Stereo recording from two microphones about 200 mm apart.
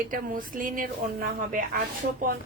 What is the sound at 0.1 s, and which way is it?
Speech, 45° right (ahead or behind).